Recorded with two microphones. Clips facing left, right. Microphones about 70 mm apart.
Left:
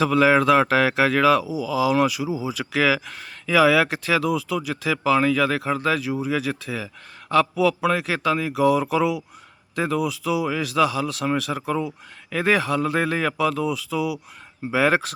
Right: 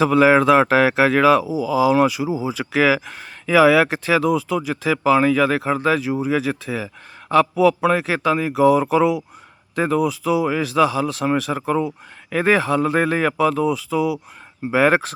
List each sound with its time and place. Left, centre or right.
0.0 s speech: right